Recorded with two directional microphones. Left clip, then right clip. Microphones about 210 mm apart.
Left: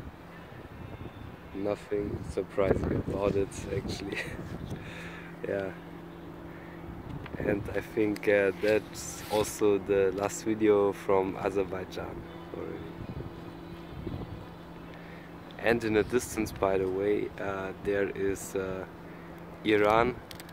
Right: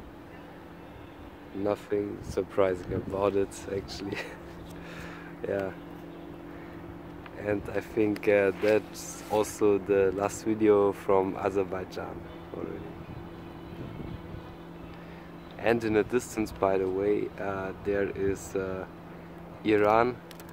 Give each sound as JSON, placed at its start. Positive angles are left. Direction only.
{"t": 1.6, "sound": "speech", "side_deg": -20}
{"t": 5.4, "sound": "speech", "side_deg": -10}
{"t": 7.4, "sound": "speech", "side_deg": -10}
{"t": 15.6, "sound": "speech", "side_deg": -5}